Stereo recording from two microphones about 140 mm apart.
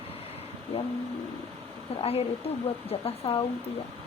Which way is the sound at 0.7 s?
50° left (ahead or behind).